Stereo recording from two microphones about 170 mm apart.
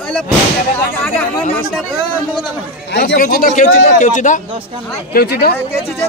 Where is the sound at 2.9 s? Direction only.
85° left.